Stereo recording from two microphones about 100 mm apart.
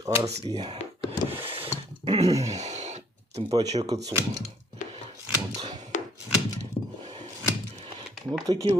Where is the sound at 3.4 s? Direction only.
60° right (ahead or behind).